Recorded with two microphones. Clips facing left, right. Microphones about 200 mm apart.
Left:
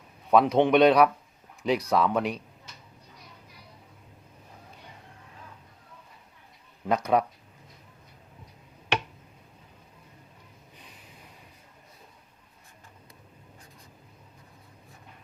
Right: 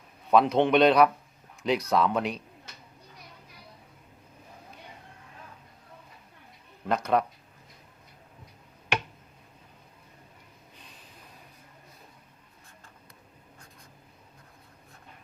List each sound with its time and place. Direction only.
0.3 s speech: 5° left (ahead or behind)
6.8 s speech: 10° left (ahead or behind)